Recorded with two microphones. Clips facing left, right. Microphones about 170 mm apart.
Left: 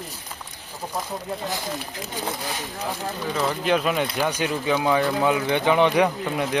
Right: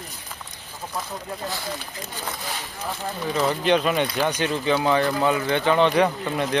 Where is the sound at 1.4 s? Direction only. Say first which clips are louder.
Right 1 dB; 20° left (ahead or behind).